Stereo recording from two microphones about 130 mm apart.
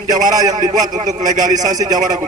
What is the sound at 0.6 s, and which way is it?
A man's voice, 75° right (ahead or behind).